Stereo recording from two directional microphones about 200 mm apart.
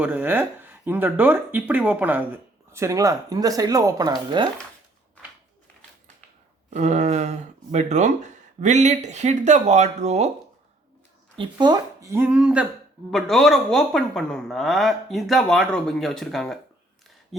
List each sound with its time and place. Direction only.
0.0 s speech: 10° right (ahead or behind)
6.7 s speech: 35° right (ahead or behind)
11.3 s speech: 20° right (ahead or behind); by 16.6 s centre (ahead or behind)